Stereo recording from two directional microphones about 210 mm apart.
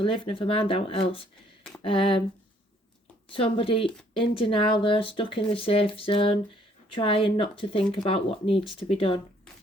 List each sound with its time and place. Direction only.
0.0 s speech: 25° left (ahead or behind)
3.3 s speech: 25° left (ahead or behind)